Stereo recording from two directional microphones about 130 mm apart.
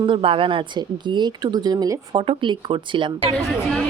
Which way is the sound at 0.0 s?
40° right (ahead or behind).